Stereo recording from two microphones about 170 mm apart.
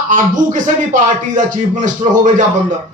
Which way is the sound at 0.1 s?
50° right (ahead or behind).